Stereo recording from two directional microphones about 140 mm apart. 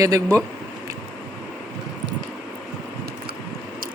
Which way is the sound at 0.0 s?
20° right (ahead or behind).